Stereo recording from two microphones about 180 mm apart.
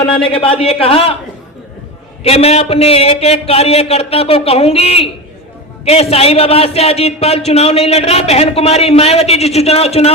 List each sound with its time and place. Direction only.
0.0 s a man's voice: 30° left (ahead or behind)
2.2 s a man's voice: 35° left (ahead or behind)